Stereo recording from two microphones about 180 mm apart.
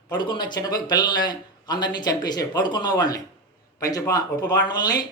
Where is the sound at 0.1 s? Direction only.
25° left (ahead or behind).